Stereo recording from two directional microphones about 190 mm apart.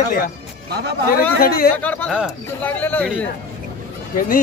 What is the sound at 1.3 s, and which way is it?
Speech, 55° left (ahead or behind).